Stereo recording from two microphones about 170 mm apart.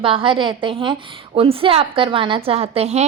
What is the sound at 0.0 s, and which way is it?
A woman's voice, 30° right (ahead or behind).